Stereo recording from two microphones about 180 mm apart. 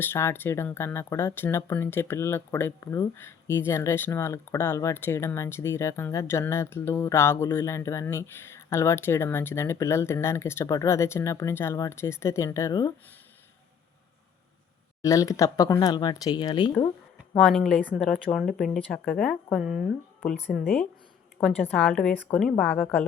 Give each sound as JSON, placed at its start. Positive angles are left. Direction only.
{"t": 0.0, "sound": "speech", "side_deg": 15}
{"t": 15.0, "sound": "speech", "side_deg": 20}
{"t": 17.4, "sound": "speech", "side_deg": 0}